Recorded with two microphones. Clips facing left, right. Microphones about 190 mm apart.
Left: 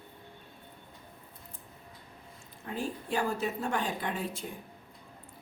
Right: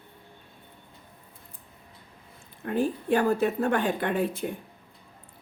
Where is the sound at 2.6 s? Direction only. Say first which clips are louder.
Right 10 dB; 60° right (ahead or behind).